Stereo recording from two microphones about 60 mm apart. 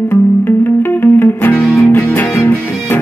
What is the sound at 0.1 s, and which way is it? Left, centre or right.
Music, left.